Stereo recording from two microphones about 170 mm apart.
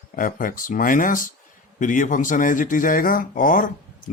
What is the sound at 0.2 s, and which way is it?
Speech, 55° left (ahead or behind).